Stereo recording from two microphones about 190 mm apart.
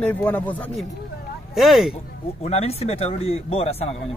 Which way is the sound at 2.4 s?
35° left (ahead or behind).